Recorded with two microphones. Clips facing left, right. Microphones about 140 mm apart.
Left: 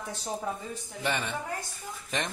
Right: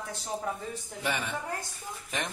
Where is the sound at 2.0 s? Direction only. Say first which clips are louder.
Left 2 dB; 5° right (ahead or behind).